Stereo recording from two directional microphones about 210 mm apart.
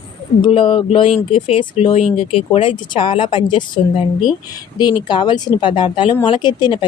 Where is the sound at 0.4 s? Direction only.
25° left (ahead or behind).